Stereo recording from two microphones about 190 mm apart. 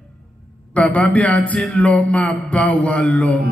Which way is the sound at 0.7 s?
5° left (ahead or behind).